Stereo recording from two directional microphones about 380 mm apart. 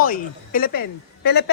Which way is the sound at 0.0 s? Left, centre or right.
Left.